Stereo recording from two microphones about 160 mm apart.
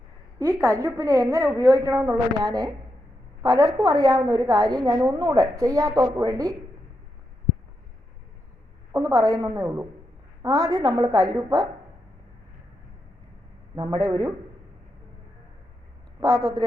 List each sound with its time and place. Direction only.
0.3 s a woman's voice: 15° right (ahead or behind)
8.9 s a woman's voice: 20° right (ahead or behind)
13.7 s a woman's voice: 25° right (ahead or behind)
16.2 s a woman's voice: 20° right (ahead or behind)